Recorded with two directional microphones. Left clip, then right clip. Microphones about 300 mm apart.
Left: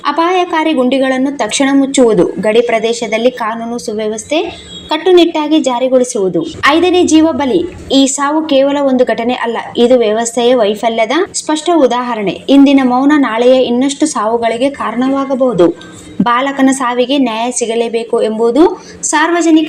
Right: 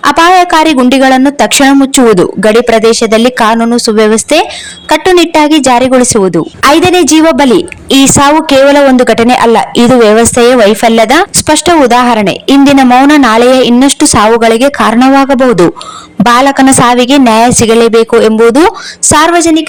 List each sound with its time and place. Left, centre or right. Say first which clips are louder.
0.0 s speech: right 8 dB; right